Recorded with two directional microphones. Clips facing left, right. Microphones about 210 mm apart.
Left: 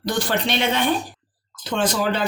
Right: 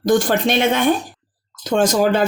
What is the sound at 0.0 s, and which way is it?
Speech, 45° right (ahead or behind).